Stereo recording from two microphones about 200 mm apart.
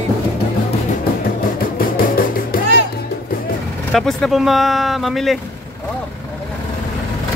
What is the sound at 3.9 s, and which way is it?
Speech, centre (ahead or behind).